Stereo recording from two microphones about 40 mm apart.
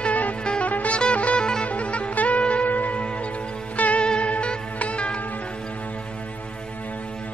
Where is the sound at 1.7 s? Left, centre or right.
Left.